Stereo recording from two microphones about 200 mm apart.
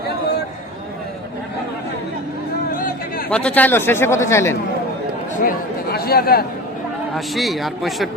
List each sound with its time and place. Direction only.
2.7 s a sound: 45° left (ahead or behind)
3.2 s speech: 5° left (ahead or behind)
5.4 s speech: 45° left (ahead or behind)
7.3 s speech: centre (ahead or behind)